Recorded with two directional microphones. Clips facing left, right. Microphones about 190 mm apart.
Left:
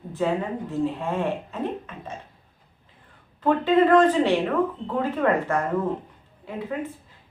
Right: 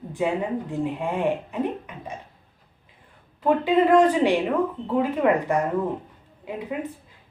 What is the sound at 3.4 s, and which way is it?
A woman's voice, 10° right (ahead or behind).